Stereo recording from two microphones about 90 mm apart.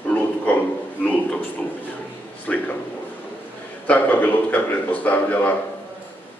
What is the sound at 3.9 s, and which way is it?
Speech, 20° left (ahead or behind).